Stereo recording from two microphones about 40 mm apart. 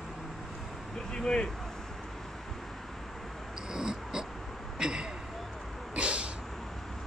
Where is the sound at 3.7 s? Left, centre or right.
Centre.